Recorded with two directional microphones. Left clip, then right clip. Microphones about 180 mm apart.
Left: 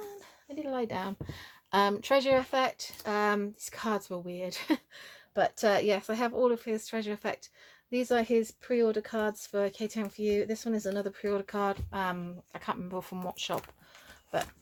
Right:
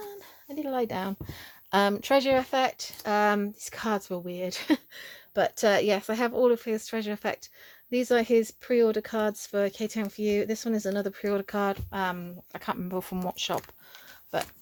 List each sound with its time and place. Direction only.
0.5 s a woman's voice: 50° right (ahead or behind)